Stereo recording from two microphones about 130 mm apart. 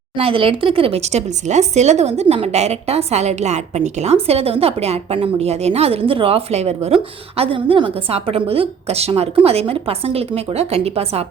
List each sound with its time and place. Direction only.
0.2 s a woman's voice: 45° right (ahead or behind)